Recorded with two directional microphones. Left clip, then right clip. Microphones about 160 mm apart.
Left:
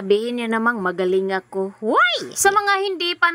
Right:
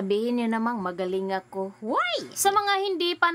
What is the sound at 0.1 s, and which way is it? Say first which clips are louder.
A woman's voice: left 7 dB; 25° left (ahead or behind).